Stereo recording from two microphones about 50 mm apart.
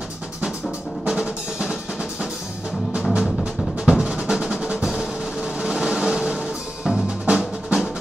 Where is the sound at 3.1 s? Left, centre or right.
Centre.